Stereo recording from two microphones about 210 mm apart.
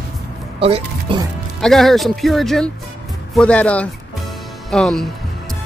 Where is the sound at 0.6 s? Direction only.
25° right (ahead or behind).